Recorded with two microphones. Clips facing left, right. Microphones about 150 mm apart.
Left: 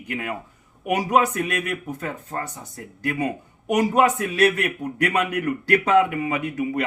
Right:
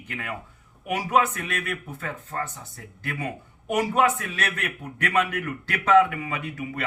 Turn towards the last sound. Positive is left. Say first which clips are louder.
# left 7 dB
turn(degrees=20)  # may be behind; listen again after turning